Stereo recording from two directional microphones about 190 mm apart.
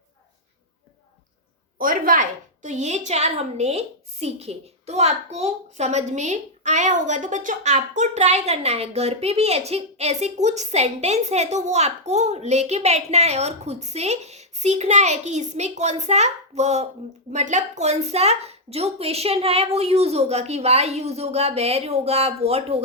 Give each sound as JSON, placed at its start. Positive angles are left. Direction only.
{"t": 1.8, "sound": "a woman's voice", "side_deg": -45}